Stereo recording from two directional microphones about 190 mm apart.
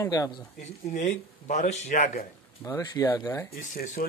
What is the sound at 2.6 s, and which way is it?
Speech, 20° left (ahead or behind).